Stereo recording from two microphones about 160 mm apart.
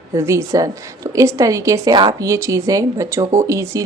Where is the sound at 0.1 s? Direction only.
20° right (ahead or behind).